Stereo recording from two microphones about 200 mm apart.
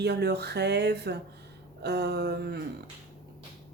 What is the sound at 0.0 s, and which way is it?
A woman's voice, 55° right (ahead or behind).